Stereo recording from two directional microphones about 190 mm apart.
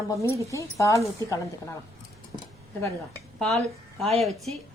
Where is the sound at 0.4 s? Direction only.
15° left (ahead or behind).